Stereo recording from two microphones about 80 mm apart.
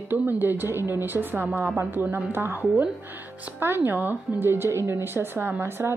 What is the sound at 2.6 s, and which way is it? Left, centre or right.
Speech, centre.